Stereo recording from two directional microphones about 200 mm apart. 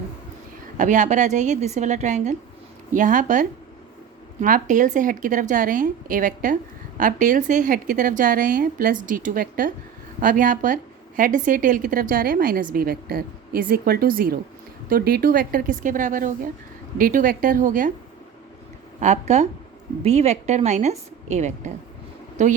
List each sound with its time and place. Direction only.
0.8 s a woman's voice: 40° right (ahead or behind)
18.9 s a woman's voice: 35° right (ahead or behind)